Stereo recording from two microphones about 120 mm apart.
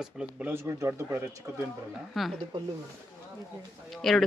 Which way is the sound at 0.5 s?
20° right (ahead or behind).